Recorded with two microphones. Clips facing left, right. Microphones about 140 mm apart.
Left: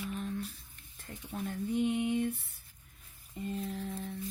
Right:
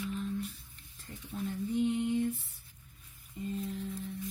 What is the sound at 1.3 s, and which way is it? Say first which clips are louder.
Speech: even; 60° left (ahead or behind).